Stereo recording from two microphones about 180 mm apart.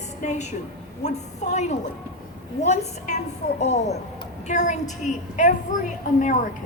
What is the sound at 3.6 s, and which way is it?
A woman's voice, 40° left (ahead or behind).